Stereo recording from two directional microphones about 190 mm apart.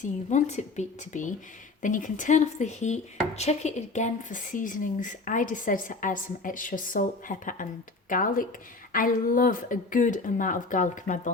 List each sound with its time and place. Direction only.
0.0 s a woman's voice: 40° left (ahead or behind)